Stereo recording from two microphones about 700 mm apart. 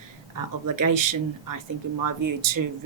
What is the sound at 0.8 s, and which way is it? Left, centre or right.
Speech, right.